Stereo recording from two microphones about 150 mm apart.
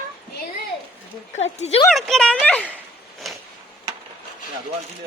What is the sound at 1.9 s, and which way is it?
Speech, 5° left (ahead or behind).